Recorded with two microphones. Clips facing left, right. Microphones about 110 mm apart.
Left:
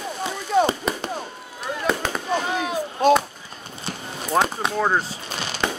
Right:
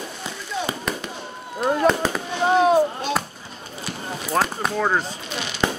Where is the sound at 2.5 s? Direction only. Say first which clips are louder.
Right 9 dB; 45° right (ahead or behind).